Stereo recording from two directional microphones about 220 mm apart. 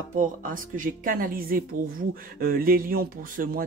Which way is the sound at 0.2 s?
35° right (ahead or behind).